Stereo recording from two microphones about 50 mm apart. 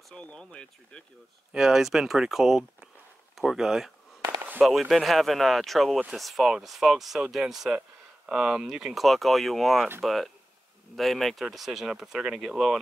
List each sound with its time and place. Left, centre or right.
0.1 s speech: centre
1.5 s speech: centre